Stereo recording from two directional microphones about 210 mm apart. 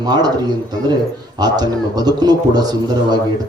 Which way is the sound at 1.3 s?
20° right (ahead or behind).